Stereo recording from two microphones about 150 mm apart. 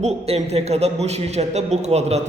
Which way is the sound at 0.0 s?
45° right (ahead or behind).